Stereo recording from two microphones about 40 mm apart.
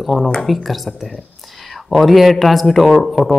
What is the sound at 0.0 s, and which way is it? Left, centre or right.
A man's voice, centre.